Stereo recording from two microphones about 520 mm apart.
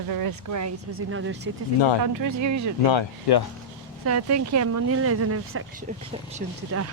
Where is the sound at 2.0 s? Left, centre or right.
Right.